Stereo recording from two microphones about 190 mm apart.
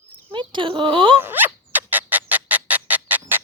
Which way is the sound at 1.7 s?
10° right (ahead or behind).